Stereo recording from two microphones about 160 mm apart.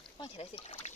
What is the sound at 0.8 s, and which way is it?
Water, 45° left (ahead or behind).